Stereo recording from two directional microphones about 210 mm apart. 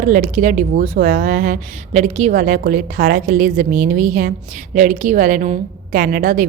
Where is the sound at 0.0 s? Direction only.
40° right (ahead or behind).